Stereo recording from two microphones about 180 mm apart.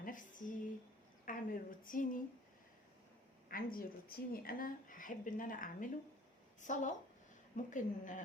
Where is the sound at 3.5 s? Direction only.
55° left (ahead or behind).